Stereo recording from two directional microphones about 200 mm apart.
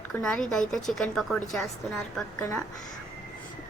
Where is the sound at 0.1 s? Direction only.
5° left (ahead or behind).